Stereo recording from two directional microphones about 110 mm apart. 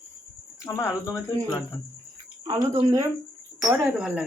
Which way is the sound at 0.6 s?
25° left (ahead or behind).